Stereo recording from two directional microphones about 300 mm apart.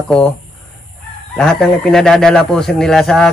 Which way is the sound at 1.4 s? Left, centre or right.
Centre.